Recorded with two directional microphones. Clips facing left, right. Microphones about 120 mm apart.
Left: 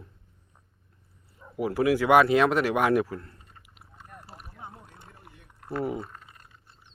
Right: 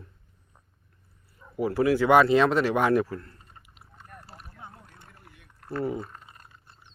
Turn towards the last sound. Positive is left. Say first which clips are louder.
# even
turn(degrees=10)  # may be behind; listen again after turning